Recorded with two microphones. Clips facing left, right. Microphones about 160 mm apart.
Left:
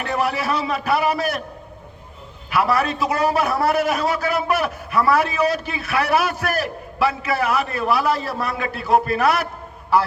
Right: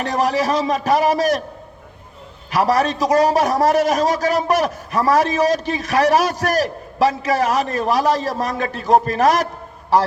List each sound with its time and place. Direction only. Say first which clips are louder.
0.0 s a man's voice: right 4 dB; 40° right (ahead or behind)
2.5 s a man's voice: right 3 dB; 40° right (ahead or behind)